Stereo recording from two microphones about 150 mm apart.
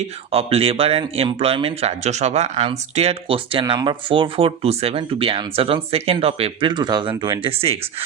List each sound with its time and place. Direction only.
0.3 s speech: 40° right (ahead or behind)